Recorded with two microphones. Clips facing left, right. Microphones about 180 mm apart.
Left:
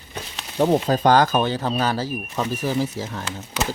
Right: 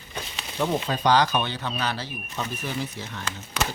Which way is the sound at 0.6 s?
35° left (ahead or behind).